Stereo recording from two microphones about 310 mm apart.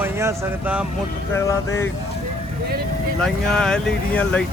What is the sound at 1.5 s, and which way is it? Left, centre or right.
Speech, centre.